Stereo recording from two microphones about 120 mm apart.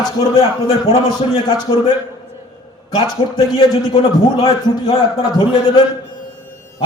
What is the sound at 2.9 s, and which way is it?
Speech, 35° left (ahead or behind).